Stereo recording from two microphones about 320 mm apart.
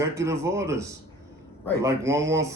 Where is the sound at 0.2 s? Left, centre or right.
Centre.